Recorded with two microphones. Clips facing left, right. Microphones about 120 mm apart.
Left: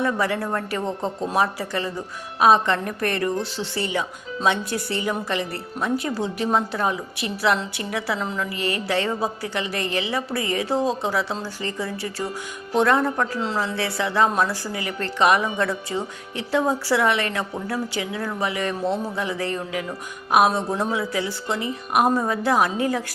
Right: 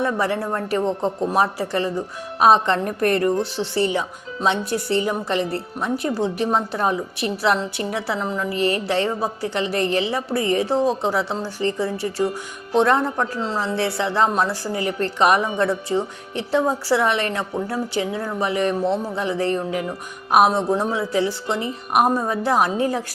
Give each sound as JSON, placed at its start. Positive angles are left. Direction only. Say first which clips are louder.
{"t": 0.0, "sound": "a woman's voice", "louder": "right 1 dB", "side_deg": -25}
{"t": 3.6, "sound": "a woman's voice", "louder": "right 4 dB", "side_deg": -20}